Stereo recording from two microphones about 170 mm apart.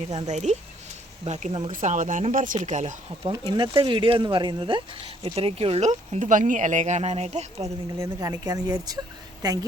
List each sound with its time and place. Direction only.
0.3 s speech: 40° right (ahead or behind)
3.2 s speech: 25° right (ahead or behind); by 7.7 s 40° right (ahead or behind)
7.9 s a woman's voice: 20° right (ahead or behind)